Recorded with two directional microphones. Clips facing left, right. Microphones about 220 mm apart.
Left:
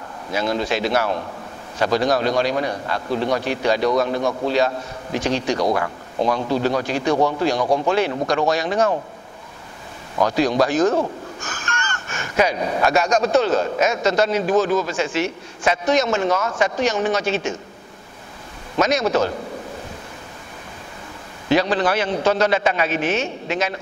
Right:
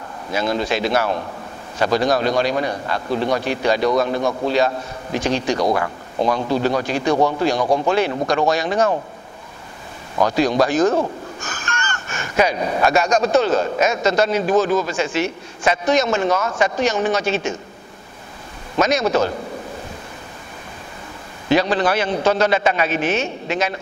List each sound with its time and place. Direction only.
0.3 s speech: 15° right (ahead or behind)
7.6 s speech: 35° right (ahead or behind)
7.9 s speech: 10° right (ahead or behind)
10.2 s speech: 15° right (ahead or behind)
18.8 s speech: 10° right (ahead or behind)
21.5 s speech: 15° right (ahead or behind)